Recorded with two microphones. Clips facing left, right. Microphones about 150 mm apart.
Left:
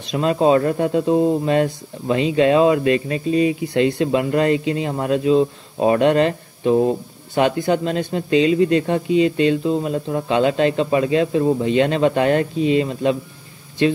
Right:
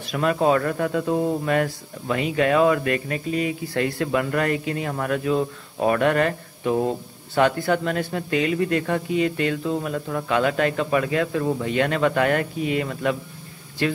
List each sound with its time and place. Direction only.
0.1 s speech: 25° left (ahead or behind)